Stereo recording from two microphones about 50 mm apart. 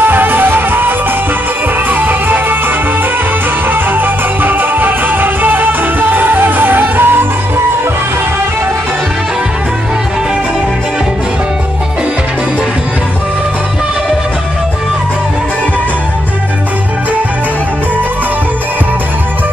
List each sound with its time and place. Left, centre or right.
0.0 s music: right
3.7 s music: right